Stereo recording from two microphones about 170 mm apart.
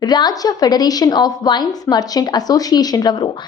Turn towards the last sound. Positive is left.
turn(degrees=25)  # may be behind; listen again after turning